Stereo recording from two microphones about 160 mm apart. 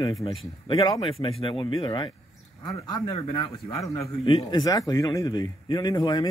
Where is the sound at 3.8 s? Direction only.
20° left (ahead or behind).